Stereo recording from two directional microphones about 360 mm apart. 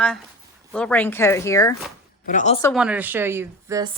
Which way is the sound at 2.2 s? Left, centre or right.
Centre.